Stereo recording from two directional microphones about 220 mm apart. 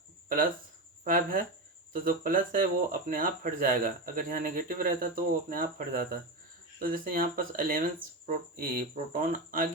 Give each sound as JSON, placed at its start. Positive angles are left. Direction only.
{"t": 1.0, "sound": "speech", "side_deg": -40}